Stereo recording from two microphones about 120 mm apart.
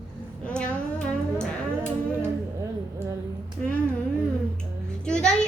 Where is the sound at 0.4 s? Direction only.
10° left (ahead or behind).